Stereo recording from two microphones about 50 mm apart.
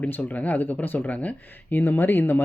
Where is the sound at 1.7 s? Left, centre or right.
Left.